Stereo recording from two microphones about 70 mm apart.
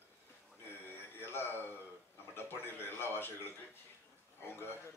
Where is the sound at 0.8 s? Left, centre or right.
Left.